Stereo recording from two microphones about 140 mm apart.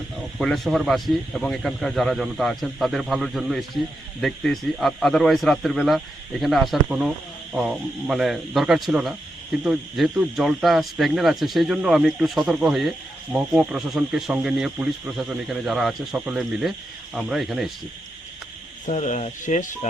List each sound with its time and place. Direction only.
0.2 s speech: centre (ahead or behind)
18.9 s speech: 55° left (ahead or behind)